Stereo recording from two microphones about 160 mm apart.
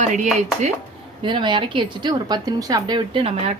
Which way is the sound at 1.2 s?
30° right (ahead or behind).